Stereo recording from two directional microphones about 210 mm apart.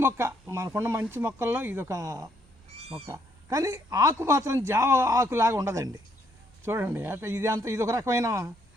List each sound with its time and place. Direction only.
0.0 s speech: 10° right (ahead or behind)
2.7 s cat: 30° right (ahead or behind)
3.1 s speech: 15° right (ahead or behind)